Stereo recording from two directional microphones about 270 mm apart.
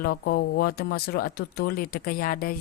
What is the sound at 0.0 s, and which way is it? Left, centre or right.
Speech, left.